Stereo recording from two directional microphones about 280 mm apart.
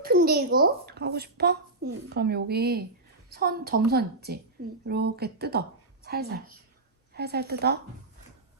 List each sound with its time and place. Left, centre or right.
0.0 s a woman's voice: right